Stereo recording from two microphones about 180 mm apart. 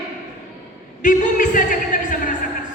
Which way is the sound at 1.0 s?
45° left (ahead or behind).